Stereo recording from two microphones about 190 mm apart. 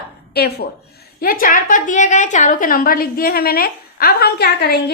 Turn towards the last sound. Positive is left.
turn(degrees=55)  # may be behind; listen again after turning